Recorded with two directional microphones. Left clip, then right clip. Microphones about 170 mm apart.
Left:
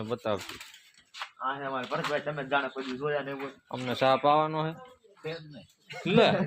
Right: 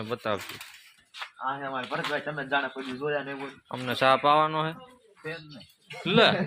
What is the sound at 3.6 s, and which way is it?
Speech, 10° right (ahead or behind).